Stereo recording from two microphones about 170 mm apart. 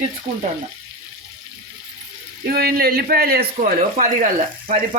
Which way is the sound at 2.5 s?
65° right (ahead or behind).